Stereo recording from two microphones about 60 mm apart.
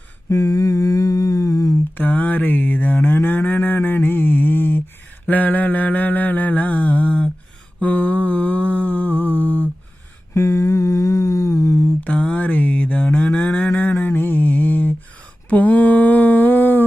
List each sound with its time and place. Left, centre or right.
0.3 s humming: left
2.0 s cattle: left
5.3 s mantra: left
10.3 s humming: left
12.0 s a sound: left
14.0 s mantra: left
15.4 s a sound: left